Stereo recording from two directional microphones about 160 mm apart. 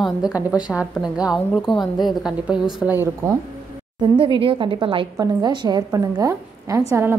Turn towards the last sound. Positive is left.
turn(degrees=-15)  # may be behind; listen again after turning